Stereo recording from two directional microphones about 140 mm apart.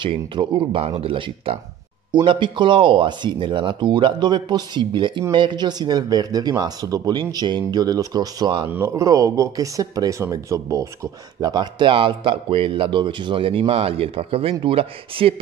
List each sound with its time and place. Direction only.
0.0 s speech: 35° right (ahead or behind)
8.6 s speech: 15° right (ahead or behind); by 15.3 s 40° right (ahead or behind)